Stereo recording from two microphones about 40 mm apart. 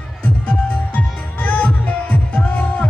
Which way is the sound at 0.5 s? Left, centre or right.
Left.